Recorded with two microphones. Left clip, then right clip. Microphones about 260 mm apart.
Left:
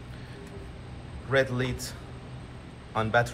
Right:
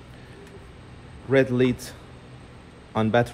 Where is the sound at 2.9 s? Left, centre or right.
Right.